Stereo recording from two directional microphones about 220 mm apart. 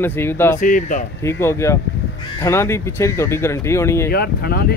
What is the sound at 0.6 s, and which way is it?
Speech, 35° left (ahead or behind).